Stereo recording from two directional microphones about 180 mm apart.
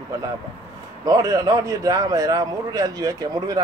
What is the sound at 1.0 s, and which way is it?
A man's voice, 20° right (ahead or behind).